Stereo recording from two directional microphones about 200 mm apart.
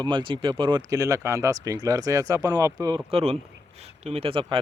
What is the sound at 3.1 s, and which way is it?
Speech, 30° right (ahead or behind).